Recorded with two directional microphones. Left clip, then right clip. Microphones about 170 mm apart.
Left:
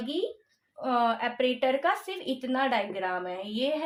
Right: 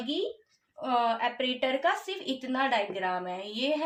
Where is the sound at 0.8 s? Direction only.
25° left (ahead or behind).